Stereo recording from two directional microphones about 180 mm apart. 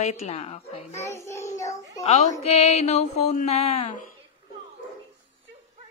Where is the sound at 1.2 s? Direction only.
15° left (ahead or behind).